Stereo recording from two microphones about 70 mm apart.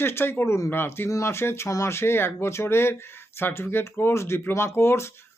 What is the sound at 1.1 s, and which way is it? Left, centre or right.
Speech, left.